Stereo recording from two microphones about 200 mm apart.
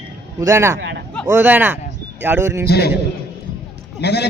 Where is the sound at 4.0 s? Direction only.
55° left (ahead or behind).